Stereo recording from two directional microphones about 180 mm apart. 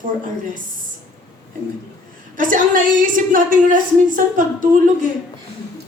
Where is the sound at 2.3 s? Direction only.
45° right (ahead or behind).